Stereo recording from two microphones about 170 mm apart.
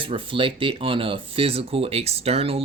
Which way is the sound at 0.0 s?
30° right (ahead or behind).